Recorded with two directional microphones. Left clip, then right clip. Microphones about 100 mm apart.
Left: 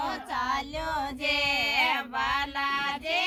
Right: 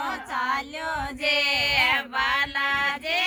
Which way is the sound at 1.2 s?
15° right (ahead or behind).